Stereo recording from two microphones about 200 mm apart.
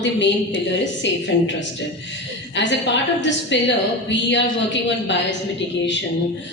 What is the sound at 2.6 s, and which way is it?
A woman's voice, 65° left (ahead or behind).